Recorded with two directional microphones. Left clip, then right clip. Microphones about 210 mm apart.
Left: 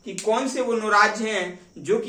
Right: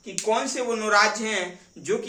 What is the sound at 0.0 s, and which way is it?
Speech, 20° right (ahead or behind).